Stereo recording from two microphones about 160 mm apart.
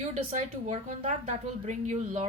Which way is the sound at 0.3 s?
45° right (ahead or behind).